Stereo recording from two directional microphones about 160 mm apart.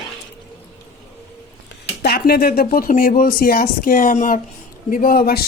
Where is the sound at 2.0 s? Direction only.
75° left (ahead or behind).